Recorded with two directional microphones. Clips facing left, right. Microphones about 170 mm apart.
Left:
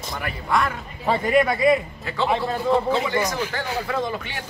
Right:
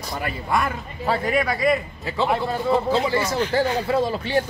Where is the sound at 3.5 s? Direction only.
35° right (ahead or behind).